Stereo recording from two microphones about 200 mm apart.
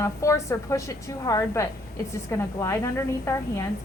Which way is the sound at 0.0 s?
15° left (ahead or behind).